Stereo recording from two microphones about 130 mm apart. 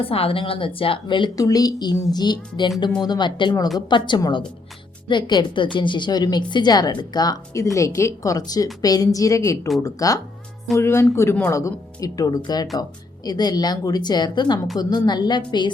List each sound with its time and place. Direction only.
0.0 s a woman's voice: 45° left (ahead or behind)